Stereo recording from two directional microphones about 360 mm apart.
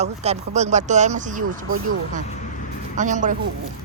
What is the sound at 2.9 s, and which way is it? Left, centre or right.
Speech, right.